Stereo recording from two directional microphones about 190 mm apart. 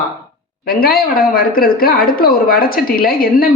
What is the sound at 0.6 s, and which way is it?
A woman's voice, 50° left (ahead or behind).